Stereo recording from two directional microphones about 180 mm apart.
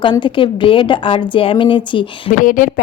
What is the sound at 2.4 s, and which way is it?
Speech, 50° left (ahead or behind).